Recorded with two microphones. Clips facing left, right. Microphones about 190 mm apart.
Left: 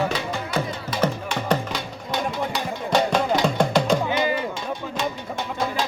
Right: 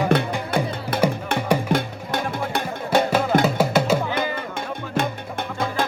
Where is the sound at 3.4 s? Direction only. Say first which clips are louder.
Right 1 dB; 5° right (ahead or behind).